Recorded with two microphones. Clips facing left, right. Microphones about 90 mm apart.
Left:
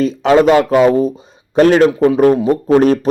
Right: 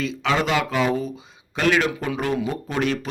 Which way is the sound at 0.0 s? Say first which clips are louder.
Left 12 dB; 45° left (ahead or behind).